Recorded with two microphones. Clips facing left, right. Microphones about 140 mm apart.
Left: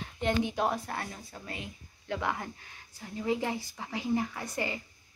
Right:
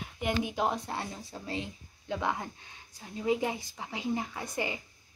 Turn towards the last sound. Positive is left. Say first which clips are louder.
# even
turn(degrees=-15)  # may be behind; listen again after turning